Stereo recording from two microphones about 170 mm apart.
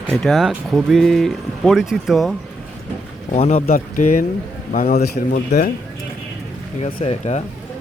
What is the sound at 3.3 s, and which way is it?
Speech, 45° left (ahead or behind).